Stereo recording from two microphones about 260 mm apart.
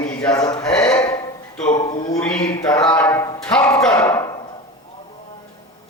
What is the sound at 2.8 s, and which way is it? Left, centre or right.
Speech, centre.